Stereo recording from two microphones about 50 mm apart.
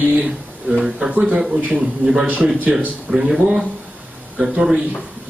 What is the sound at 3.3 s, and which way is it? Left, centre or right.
A man's voice, centre.